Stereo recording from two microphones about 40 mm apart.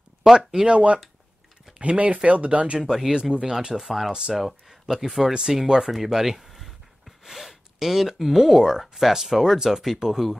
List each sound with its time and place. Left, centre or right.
0.7 s speech: right
2.9 s speech: centre
3.7 s speech: centre